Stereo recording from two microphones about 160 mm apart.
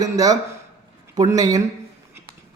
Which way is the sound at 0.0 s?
20° right (ahead or behind).